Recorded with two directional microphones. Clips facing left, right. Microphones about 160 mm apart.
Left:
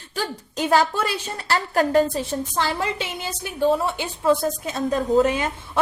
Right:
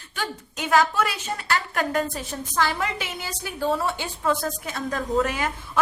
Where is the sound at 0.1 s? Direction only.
35° left (ahead or behind).